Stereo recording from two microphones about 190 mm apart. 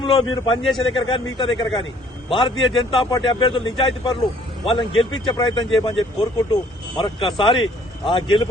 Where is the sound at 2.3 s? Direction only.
25° left (ahead or behind).